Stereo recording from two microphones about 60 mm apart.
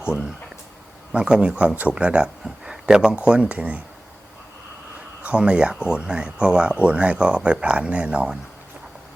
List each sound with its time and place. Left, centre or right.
0.0 s speech: centre
5.2 s speech: centre